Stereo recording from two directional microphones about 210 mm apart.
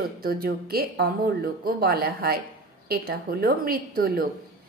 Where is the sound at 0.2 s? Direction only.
45° right (ahead or behind).